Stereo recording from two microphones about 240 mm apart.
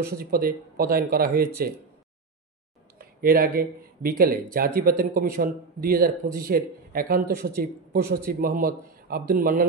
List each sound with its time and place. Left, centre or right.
0.0 s speech: right
3.0 s a man's voice: right